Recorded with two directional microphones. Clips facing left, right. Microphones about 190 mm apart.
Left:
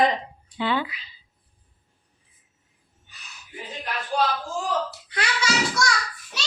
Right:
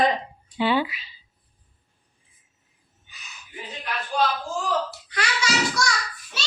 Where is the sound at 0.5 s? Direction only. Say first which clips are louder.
Right 3 dB; 15° right (ahead or behind).